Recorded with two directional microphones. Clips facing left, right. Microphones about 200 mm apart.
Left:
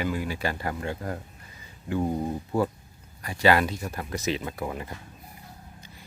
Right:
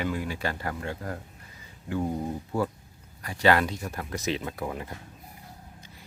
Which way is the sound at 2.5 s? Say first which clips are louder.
Left 3 dB; 20° left (ahead or behind).